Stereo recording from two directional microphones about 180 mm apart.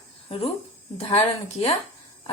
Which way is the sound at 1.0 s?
35° left (ahead or behind).